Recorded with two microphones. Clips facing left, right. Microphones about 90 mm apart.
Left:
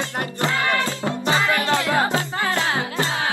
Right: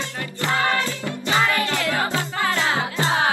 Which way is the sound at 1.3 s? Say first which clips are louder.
Left 1 dB; 25° left (ahead or behind).